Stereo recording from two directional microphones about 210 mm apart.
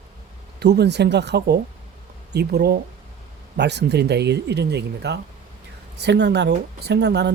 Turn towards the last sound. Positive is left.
turn(degrees=-55)  # may be behind; listen again after turning